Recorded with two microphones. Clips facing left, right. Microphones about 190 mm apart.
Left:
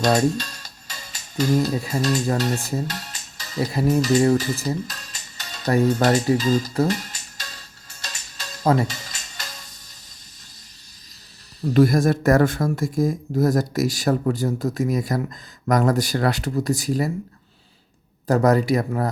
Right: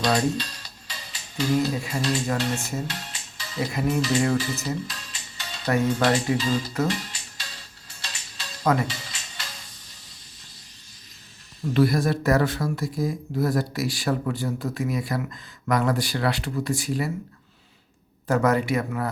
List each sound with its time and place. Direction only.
0.0 s music: 45° left (ahead or behind)
11.6 s speech: 45° left (ahead or behind)
18.3 s speech: 35° left (ahead or behind)